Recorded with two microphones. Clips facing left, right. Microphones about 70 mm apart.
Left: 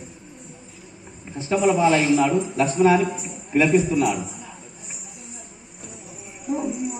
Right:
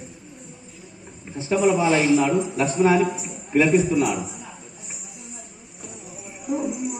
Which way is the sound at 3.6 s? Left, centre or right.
Right.